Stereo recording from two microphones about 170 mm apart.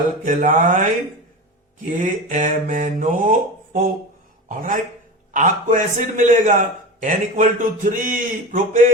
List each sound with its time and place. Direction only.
0.3 s a man's voice: 50° right (ahead or behind)
1.8 s a man's voice: 50° right (ahead or behind)